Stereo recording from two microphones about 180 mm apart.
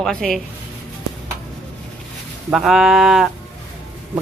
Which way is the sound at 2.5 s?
Centre (ahead or behind).